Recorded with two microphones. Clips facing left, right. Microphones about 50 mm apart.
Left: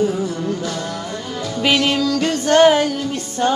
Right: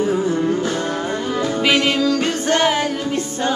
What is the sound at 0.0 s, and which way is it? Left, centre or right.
Music, right.